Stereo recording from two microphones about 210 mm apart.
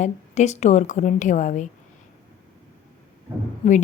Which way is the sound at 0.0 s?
35° left (ahead or behind).